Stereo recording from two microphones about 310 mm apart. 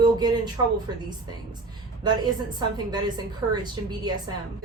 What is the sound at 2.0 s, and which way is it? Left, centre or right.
A woman's voice, centre.